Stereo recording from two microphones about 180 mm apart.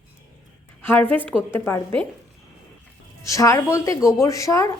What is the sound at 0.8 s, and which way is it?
Speech, 10° left (ahead or behind).